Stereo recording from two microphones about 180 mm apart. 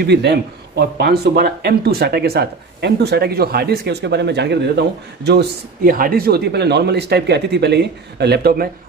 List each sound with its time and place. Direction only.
0.0 s a man's voice: 70° right (ahead or behind)
5.9 s speech: 50° right (ahead or behind)